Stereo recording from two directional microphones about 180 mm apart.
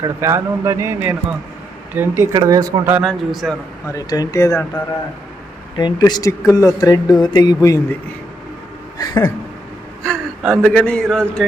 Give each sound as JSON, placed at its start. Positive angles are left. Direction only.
{"t": 0.0, "sound": "speech", "side_deg": -15}
{"t": 3.0, "sound": "a man's voice", "side_deg": 0}
{"t": 3.8, "sound": "speech", "side_deg": 20}
{"t": 5.7, "sound": "speech", "side_deg": 25}
{"t": 9.0, "sound": "a sound", "side_deg": 20}
{"t": 10.0, "sound": "gasp", "side_deg": 5}
{"t": 10.6, "sound": "a man's voice", "side_deg": 5}